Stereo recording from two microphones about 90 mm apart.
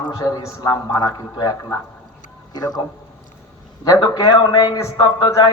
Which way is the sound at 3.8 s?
45° left (ahead or behind).